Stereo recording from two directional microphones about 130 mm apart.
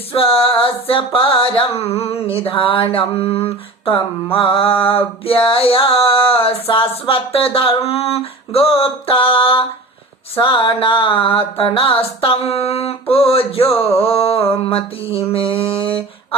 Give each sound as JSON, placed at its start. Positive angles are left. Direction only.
{"t": 0.1, "sound": "mantra", "side_deg": 45}